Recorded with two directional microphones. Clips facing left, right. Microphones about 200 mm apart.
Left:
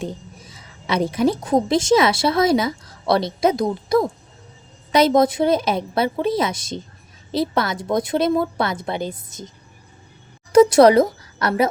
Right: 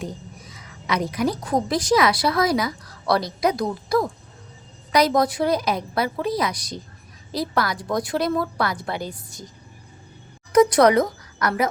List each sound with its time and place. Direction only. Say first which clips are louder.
0.0 s a woman's voice: left 3 dB; 30° left (ahead or behind)
10.5 s speech: left 4 dB; 30° left (ahead or behind)